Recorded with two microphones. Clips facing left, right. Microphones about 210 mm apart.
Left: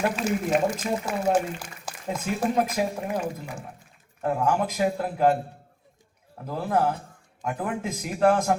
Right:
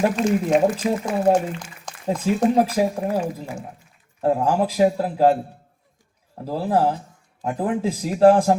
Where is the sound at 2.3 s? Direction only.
35° right (ahead or behind).